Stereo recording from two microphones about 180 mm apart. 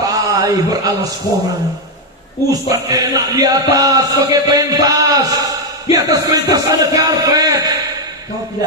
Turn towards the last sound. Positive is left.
turn(degrees=-20)  # may be behind; listen again after turning